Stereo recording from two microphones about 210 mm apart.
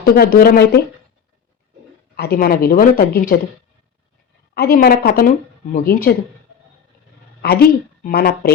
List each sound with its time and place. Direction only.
0.0 s speech: 45° left (ahead or behind)
2.1 s speech: 50° left (ahead or behind)
4.5 s speech: 45° left (ahead or behind)
7.4 s speech: 45° left (ahead or behind)